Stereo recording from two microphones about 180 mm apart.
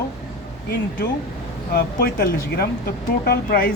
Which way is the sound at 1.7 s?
55° left (ahead or behind).